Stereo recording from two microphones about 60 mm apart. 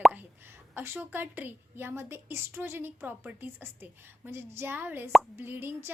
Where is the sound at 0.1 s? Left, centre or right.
Right.